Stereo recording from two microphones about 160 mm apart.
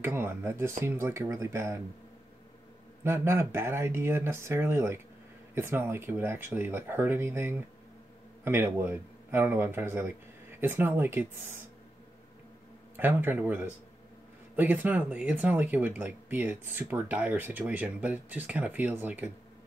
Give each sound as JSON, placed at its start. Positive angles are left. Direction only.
{"t": 0.0, "sound": "speech", "side_deg": -15}
{"t": 3.0, "sound": "speech", "side_deg": -15}
{"t": 12.9, "sound": "speech", "side_deg": -10}